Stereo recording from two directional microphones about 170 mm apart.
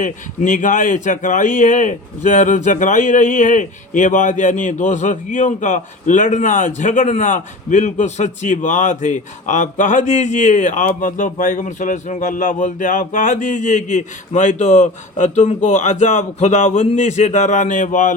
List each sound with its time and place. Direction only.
0.0 s speech: 50° left (ahead or behind)